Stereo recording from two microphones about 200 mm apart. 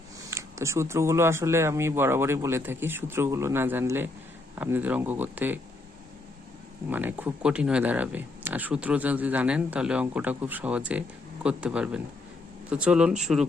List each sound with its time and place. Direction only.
0.3 s speech: 15° right (ahead or behind)
6.9 s speech: 10° right (ahead or behind)